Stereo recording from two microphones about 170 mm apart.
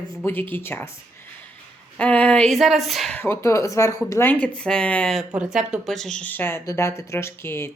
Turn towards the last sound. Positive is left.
turn(degrees=15)  # may be behind; listen again after turning